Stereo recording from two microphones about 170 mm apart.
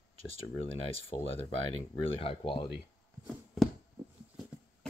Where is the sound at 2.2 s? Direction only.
35° left (ahead or behind).